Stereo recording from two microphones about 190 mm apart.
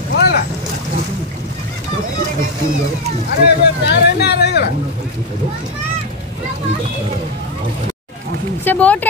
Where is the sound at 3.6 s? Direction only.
60° left (ahead or behind).